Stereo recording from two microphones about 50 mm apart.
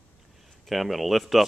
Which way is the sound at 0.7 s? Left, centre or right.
Centre.